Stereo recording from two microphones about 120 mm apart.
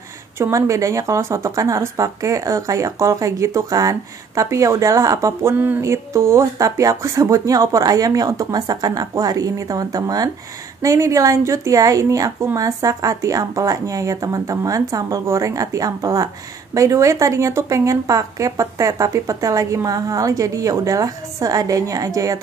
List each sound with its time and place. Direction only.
0.4 s speech: 25° right (ahead or behind)